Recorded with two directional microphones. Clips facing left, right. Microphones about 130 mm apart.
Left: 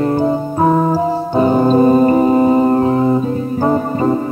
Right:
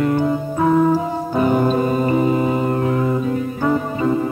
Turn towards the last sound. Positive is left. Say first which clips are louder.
# left 4 dB
turn(degrees=40)  # may be behind; listen again after turning